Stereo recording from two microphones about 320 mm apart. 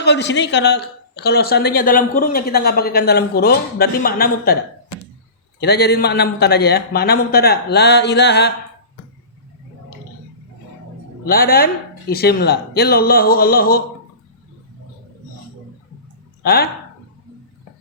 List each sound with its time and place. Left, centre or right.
0.0 s speech: left
5.5 s a man's voice: left
11.3 s speech: left
16.4 s speech: left